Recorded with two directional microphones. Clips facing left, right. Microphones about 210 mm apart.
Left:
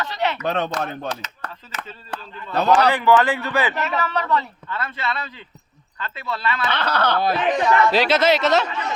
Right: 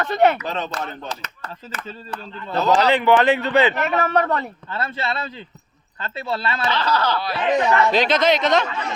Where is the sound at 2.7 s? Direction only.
20° right (ahead or behind).